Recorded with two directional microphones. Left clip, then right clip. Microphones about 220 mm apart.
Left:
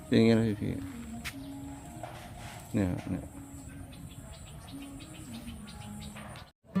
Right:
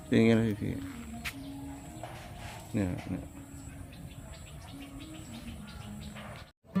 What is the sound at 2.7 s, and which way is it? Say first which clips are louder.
Speech: left 2 dB; 15° left (ahead or behind).